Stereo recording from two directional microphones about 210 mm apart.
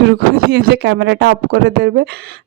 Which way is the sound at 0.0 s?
55° right (ahead or behind).